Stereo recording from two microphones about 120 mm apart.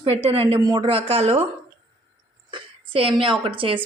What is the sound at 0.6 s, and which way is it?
Speech, 40° right (ahead or behind).